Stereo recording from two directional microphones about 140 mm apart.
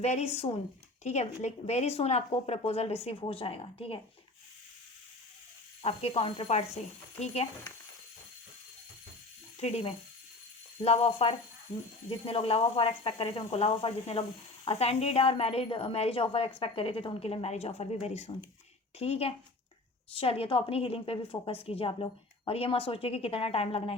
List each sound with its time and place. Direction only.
0.0 s a woman's voice: 50° left (ahead or behind)
5.8 s a woman's voice: 40° left (ahead or behind)
9.6 s a woman's voice: 50° left (ahead or behind)